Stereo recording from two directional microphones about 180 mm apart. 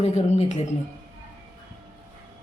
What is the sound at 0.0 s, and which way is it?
Speech, 35° left (ahead or behind).